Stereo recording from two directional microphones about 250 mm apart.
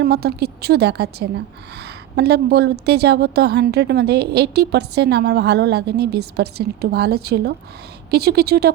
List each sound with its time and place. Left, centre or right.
0.0 s a woman's voice: right